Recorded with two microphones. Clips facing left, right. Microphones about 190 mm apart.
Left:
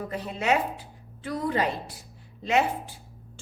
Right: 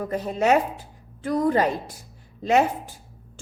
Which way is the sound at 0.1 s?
45° right (ahead or behind).